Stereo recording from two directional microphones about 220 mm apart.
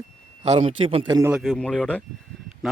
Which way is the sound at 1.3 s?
Centre (ahead or behind).